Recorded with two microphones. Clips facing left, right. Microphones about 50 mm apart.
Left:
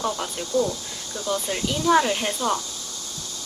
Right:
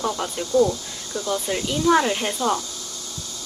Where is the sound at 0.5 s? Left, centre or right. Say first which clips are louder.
Right 5 dB; right.